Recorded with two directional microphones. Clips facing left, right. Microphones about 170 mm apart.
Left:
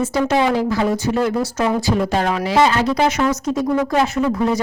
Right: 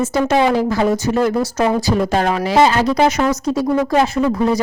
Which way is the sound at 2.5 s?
35° right (ahead or behind).